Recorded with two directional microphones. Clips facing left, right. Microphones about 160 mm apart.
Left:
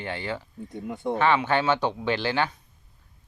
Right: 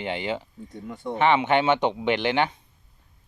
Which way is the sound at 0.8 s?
60° left (ahead or behind).